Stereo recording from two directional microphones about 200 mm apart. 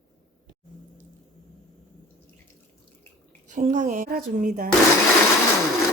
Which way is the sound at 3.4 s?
40° right (ahead or behind).